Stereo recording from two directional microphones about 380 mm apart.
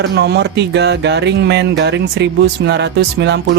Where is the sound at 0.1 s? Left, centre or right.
Right.